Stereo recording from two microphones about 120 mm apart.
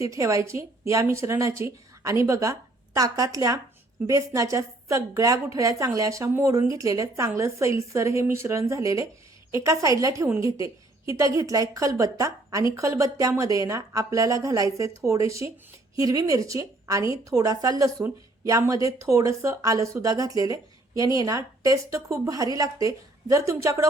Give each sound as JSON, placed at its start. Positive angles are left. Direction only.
{"t": 0.0, "sound": "speech", "side_deg": -25}